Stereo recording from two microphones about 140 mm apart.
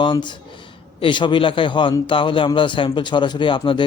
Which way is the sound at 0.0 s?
35° left (ahead or behind).